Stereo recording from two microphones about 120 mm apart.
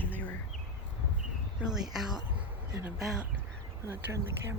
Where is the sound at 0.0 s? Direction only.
15° left (ahead or behind).